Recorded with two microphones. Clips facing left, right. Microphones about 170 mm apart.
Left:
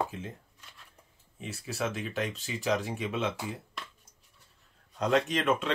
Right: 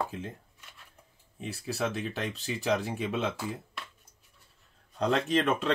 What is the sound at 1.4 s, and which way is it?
Speech, 35° right (ahead or behind).